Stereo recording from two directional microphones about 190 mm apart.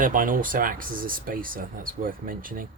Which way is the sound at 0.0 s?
45° right (ahead or behind).